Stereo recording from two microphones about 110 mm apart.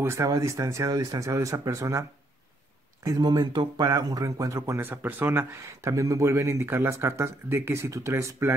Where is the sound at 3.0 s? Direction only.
35° right (ahead or behind).